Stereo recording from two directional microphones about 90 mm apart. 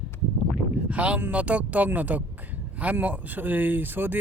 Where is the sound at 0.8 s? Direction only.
15° right (ahead or behind).